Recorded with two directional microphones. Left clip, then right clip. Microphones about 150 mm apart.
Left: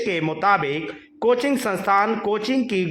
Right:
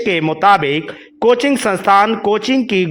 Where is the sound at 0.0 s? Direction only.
25° right (ahead or behind).